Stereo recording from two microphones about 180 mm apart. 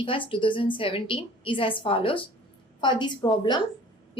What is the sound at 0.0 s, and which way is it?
A woman's voice, 30° left (ahead or behind).